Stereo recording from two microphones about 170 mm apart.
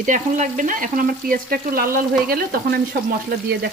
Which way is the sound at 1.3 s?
60° right (ahead or behind).